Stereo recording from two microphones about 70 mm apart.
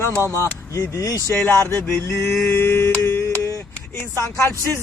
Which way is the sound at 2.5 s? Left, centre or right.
Left.